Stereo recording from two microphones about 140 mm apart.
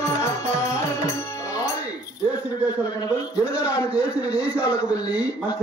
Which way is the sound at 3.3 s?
10° right (ahead or behind).